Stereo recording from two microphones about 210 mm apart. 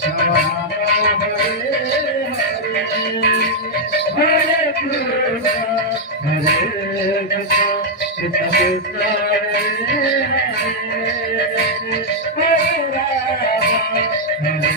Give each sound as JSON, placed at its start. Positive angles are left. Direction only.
{"t": 8.5, "sound": "speech", "side_deg": 45}